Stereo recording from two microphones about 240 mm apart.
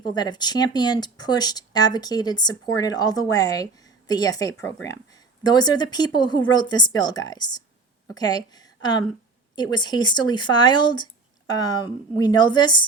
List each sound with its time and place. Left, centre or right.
0.0 s a woman's voice: centre